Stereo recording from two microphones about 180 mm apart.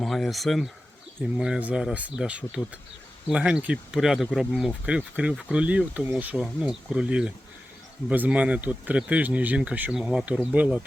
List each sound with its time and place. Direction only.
0.0 s speech: centre (ahead or behind)